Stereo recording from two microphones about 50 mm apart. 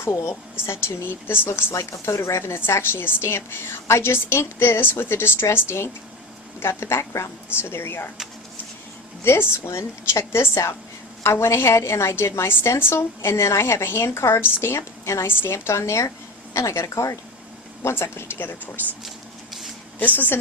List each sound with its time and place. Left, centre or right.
0.0 s a woman's voice: left
1.7 s speech: left
2.6 s a woman's voice: left
9.2 s a woman's voice: left
15.4 s a woman's voice: left
17.8 s a woman's voice: left
19.0 s a sound: centre
20.1 s a woman's voice: left